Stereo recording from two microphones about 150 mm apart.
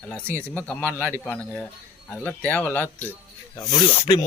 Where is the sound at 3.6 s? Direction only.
25° left (ahead or behind).